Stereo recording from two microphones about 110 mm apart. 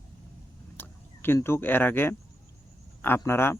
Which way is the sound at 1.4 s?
20° left (ahead or behind).